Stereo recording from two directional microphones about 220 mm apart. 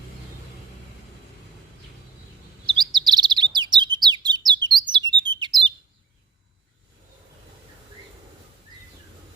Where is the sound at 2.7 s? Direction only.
20° right (ahead or behind).